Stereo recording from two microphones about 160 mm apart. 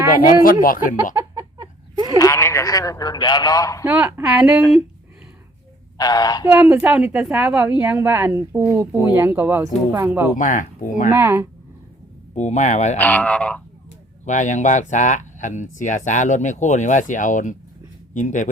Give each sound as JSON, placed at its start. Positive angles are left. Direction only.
{"t": 0.6, "sound": "speech", "side_deg": 60}
{"t": 1.2, "sound": "a sound", "side_deg": -20}
{"t": 2.1, "sound": "a man's voice", "side_deg": 20}
{"t": 3.8, "sound": "a woman's voice", "side_deg": -10}
{"t": 6.0, "sound": "a man's voice", "side_deg": 25}
{"t": 6.5, "sound": "a woman's voice", "side_deg": -10}
{"t": 10.3, "sound": "speech", "side_deg": 55}
{"t": 11.1, "sound": "a woman's voice", "side_deg": -15}
{"t": 12.3, "sound": "speech", "side_deg": 45}
{"t": 13.0, "sound": "speech", "side_deg": 10}
{"t": 14.3, "sound": "speech", "side_deg": 50}